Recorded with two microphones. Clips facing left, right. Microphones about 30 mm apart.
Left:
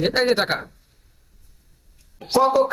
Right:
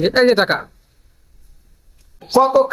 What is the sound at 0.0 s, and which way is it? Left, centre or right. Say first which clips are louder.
Speech: right 6 dB; centre.